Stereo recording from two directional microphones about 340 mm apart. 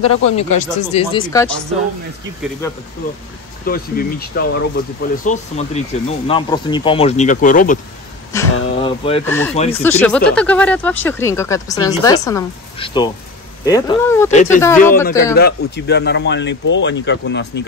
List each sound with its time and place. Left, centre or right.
0.0 s speech: centre
3.6 s speech: left
8.3 s speech: centre
14.3 s speech: left
14.6 s speech: centre
15.3 s speech: left